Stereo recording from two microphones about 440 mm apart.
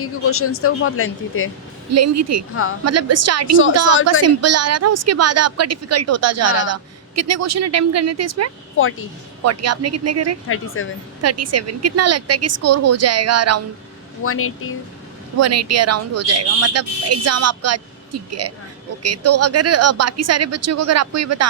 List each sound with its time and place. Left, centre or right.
0.0 s speech: left
1.9 s speech: right
10.5 s speech: left
11.2 s speech: right
14.3 s speech: left
15.4 s speech: right